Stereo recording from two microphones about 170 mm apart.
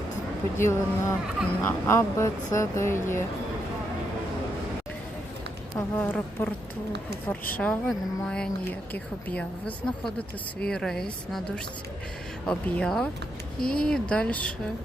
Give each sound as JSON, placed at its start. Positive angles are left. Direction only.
{"t": 0.6, "sound": "speech", "side_deg": 15}
{"t": 5.7, "sound": "speech", "side_deg": 10}